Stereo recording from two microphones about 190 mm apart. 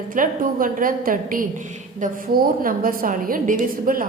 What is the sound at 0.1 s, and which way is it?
A woman's voice, 45° right (ahead or behind).